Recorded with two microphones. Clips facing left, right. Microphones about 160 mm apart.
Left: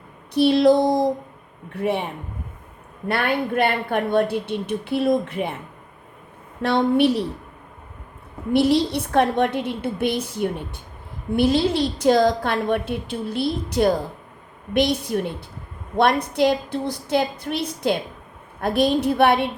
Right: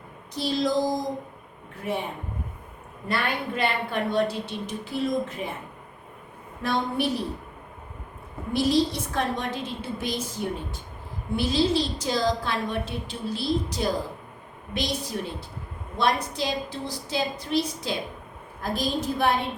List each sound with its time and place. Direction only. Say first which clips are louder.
0.3 s a woman's voice: left 9 dB; 65° left (ahead or behind)
3.1 s a woman's voice: left 6 dB; 55° left (ahead or behind)
6.6 s a woman's voice: left 8 dB; 70° left (ahead or behind)
8.5 s a woman's voice: left 5 dB; 65° left (ahead or behind)